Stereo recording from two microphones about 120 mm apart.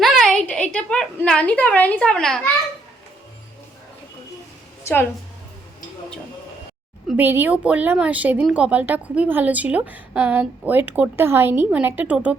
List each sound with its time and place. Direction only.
0.0 s a woman's voice: centre (ahead or behind)
4.8 s a sound: 20° left (ahead or behind)
7.2 s a woman's voice: 15° right (ahead or behind)